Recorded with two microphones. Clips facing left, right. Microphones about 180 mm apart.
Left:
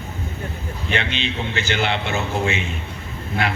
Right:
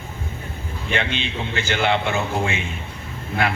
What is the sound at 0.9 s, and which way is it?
A man's voice, 50° right (ahead or behind).